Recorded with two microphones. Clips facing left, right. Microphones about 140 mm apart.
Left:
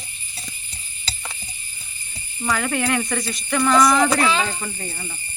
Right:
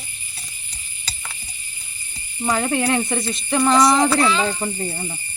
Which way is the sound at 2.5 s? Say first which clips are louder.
Right 2 dB; 25° right (ahead or behind).